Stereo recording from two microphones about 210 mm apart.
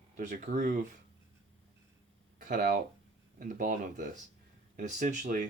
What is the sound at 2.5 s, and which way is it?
Speech, 45° right (ahead or behind).